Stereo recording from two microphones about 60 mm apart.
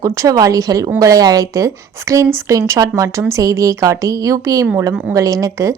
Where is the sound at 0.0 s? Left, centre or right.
Right.